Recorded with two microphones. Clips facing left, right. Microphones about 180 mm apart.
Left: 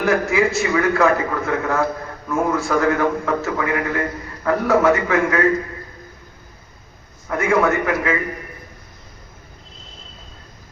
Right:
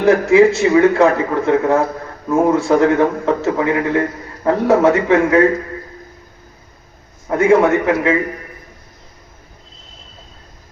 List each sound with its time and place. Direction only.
0.0 s a man's voice: 30° right (ahead or behind)
7.3 s a man's voice: 30° right (ahead or behind)